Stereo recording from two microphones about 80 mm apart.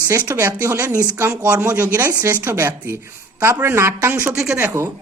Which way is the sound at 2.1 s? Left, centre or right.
Right.